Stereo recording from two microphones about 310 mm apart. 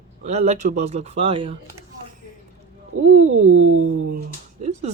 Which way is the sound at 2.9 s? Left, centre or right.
Right.